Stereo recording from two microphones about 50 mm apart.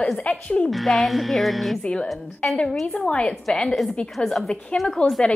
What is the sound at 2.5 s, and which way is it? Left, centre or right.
A woman's voice, left.